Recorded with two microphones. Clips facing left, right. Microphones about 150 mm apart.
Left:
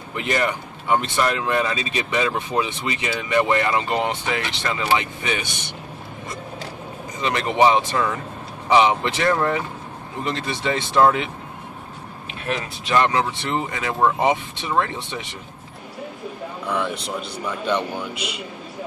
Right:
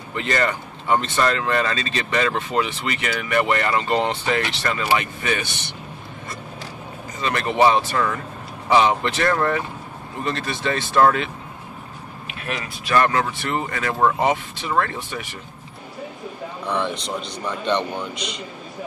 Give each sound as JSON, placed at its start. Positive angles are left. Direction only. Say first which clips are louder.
{"t": 0.1, "sound": "speech", "louder": "even", "side_deg": 15}
{"t": 7.2, "sound": "speech", "louder": "even", "side_deg": 15}
{"t": 12.4, "sound": "speech", "louder": "left 3 dB", "side_deg": 30}
{"t": 12.9, "sound": "speech", "louder": "even", "side_deg": 20}
{"t": 16.6, "sound": "speech", "louder": "right 1 dB", "side_deg": 5}